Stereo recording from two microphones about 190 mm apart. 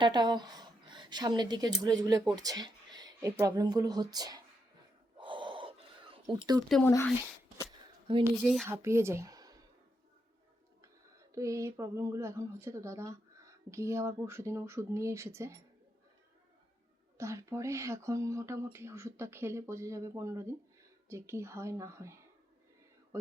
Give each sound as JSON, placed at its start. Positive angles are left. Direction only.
{"t": 0.0, "sound": "a woman's voice", "side_deg": -20}
{"t": 5.2, "sound": "gasp", "side_deg": -25}
{"t": 6.7, "sound": "speech", "side_deg": 5}
{"t": 7.6, "sound": "a sound", "side_deg": -25}
{"t": 8.4, "sound": "speech", "side_deg": 0}
{"t": 8.6, "sound": "speech", "side_deg": -15}
{"t": 11.3, "sound": "speech", "side_deg": -15}
{"t": 17.2, "sound": "speech", "side_deg": -15}